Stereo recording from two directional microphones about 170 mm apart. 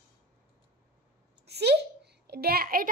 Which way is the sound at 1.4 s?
80° right.